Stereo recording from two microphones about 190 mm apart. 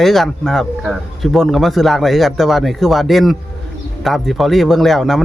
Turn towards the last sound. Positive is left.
turn(degrees=0)  # may be behind; listen again after turning